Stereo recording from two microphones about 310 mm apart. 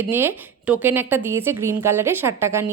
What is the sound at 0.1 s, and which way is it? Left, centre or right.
A woman's voice, centre.